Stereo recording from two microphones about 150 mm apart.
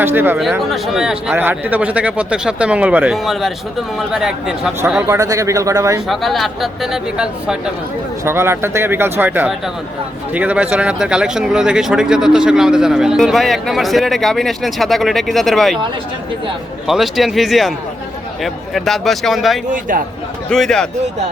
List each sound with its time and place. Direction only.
0.0 s speech: 15° right (ahead or behind)
0.6 s speech: centre (ahead or behind)
5.0 s speech: 20° right (ahead or behind)
6.1 s speech: centre (ahead or behind)
8.2 s speech: 15° right (ahead or behind); by 15.8 s centre (ahead or behind)
16.8 s speech: centre (ahead or behind)
19.9 s speech: 65° right (ahead or behind)
20.5 s speech: 5° left (ahead or behind)